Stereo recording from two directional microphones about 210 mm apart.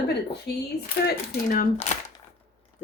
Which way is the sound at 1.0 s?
40° left (ahead or behind).